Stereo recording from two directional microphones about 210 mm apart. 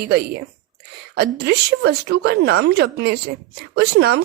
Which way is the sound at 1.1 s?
50° right (ahead or behind).